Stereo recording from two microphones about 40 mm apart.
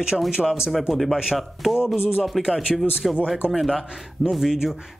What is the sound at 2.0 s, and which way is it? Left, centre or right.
Speech, left.